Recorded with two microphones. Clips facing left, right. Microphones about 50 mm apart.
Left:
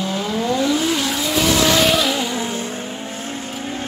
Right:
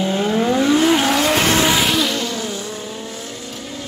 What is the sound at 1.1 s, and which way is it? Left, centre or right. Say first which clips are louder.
Vehicle: right 3 dB; right.